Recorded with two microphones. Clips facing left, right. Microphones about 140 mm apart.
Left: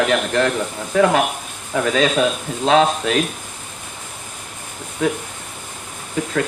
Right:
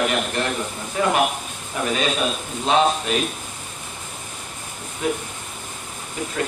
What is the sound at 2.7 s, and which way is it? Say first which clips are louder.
Speech: left 3 dB; 90° left.